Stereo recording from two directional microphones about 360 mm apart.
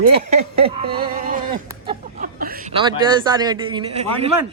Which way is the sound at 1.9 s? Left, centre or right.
Right.